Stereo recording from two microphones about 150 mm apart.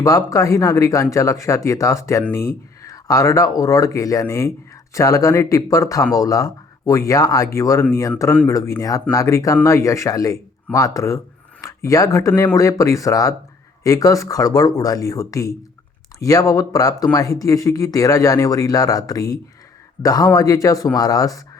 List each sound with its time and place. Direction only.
0.0 s speech: 25° left (ahead or behind)